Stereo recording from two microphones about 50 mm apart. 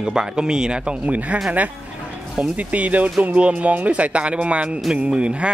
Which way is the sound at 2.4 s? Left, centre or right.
Right.